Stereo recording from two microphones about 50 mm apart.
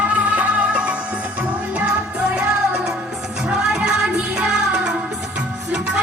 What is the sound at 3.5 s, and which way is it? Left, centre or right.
Music, centre.